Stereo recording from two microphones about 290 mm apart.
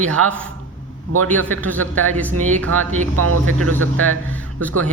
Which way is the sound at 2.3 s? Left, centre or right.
Right.